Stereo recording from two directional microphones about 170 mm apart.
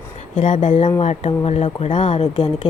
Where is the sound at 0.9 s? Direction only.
35° left (ahead or behind).